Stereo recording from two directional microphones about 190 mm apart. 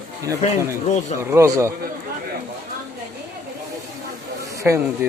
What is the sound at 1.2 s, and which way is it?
Speech, 15° right (ahead or behind).